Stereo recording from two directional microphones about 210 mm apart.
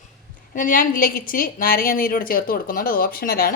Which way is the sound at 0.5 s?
40° left (ahead or behind).